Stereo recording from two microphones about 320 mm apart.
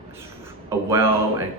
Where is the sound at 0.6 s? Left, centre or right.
Centre.